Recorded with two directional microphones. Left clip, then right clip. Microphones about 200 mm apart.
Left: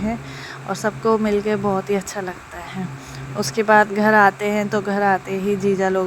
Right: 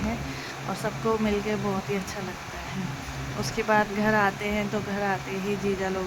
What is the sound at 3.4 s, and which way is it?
Speech, 25° left (ahead or behind).